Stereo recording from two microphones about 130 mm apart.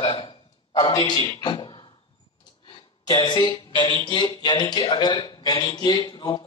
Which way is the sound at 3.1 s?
35° left (ahead or behind).